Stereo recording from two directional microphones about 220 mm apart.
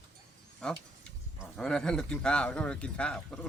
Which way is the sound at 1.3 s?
Centre (ahead or behind).